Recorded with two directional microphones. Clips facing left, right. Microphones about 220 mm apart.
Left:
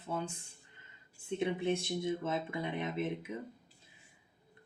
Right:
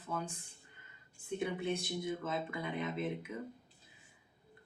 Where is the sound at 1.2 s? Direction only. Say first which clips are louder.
Left 3 dB; 25° left (ahead or behind).